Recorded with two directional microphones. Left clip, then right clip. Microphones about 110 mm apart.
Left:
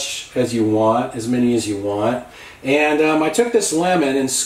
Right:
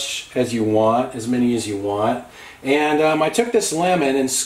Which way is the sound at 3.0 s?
30° right (ahead or behind).